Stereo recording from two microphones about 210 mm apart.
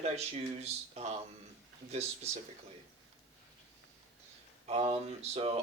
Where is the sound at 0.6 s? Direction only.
30° right (ahead or behind).